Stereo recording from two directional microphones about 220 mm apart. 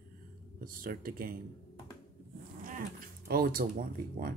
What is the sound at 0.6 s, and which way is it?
Speech, 40° right (ahead or behind).